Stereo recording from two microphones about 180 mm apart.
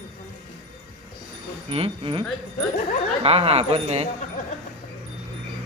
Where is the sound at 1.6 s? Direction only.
30° right (ahead or behind).